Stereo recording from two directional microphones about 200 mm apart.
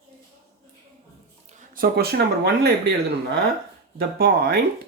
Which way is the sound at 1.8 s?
50° right (ahead or behind).